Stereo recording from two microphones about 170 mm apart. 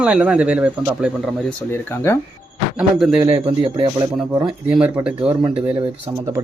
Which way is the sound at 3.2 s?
30° right (ahead or behind).